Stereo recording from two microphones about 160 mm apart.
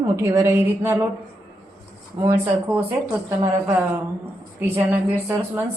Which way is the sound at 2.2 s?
15° right (ahead or behind).